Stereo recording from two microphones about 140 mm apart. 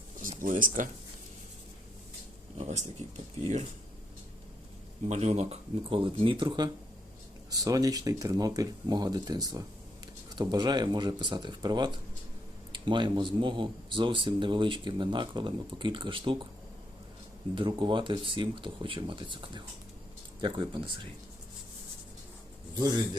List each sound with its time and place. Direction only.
0.2 s speech: 70° right (ahead or behind)
2.6 s speech: 55° right (ahead or behind)
5.0 s speech: 50° right (ahead or behind); by 16.5 s 35° right (ahead or behind)
17.5 s speech: 35° right (ahead or behind)